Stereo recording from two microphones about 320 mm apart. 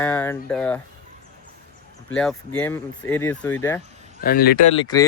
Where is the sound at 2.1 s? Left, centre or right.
Centre.